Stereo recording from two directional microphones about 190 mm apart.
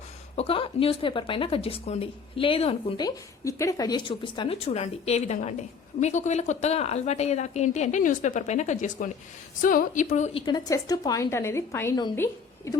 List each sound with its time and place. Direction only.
0.3 s speech: 30° left (ahead or behind)
3.4 s a woman's voice: 15° left (ahead or behind); by 10.4 s 40° left (ahead or behind)
10.4 s a woman's voice: 20° left (ahead or behind)